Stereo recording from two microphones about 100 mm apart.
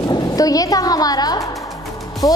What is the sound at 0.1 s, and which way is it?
A woman's voice, 40° left (ahead or behind).